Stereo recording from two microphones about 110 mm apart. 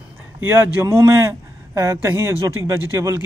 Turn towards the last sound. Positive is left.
turn(degrees=-25)  # may be behind; listen again after turning